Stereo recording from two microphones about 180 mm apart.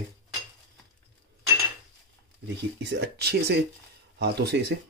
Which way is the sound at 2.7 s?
70° right (ahead or behind).